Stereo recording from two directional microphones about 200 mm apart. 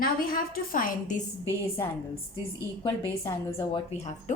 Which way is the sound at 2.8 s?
20° left (ahead or behind).